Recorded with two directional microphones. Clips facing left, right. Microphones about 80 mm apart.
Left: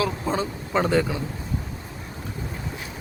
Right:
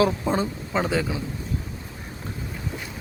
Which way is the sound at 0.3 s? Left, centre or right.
Centre.